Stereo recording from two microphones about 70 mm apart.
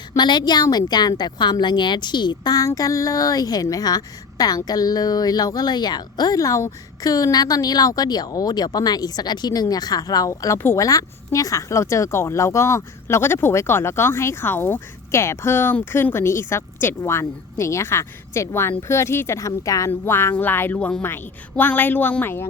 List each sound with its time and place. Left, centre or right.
0.2 s a woman's voice: left
19.9 s speech: left
20.3 s a sound: left
20.7 s a woman's voice: centre
21.5 s a sound: left
22.2 s speech: left